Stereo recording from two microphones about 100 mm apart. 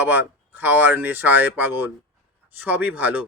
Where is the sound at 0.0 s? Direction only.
20° right (ahead or behind).